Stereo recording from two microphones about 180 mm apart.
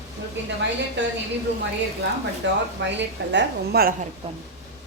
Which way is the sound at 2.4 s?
85° right.